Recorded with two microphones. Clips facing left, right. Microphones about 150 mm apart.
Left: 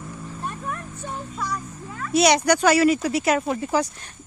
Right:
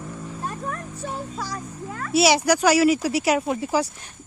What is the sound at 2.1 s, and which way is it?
Speech, 5° right (ahead or behind).